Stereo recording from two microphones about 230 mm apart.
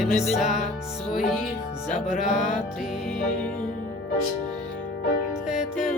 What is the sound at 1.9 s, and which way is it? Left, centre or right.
Music, left.